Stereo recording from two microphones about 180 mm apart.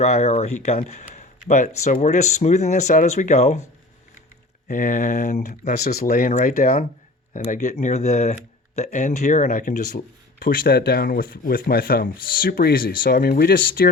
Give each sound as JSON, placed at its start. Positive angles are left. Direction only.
{"t": 0.0, "sound": "speech", "side_deg": 40}
{"t": 4.7, "sound": "speech", "side_deg": 45}
{"t": 5.8, "sound": "speech", "side_deg": 60}